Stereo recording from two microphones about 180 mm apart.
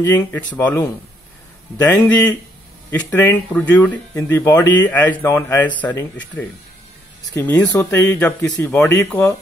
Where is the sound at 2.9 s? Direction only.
10° left (ahead or behind).